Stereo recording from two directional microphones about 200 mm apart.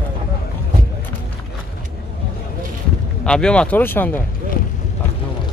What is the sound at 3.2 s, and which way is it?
Speech, 5° left (ahead or behind).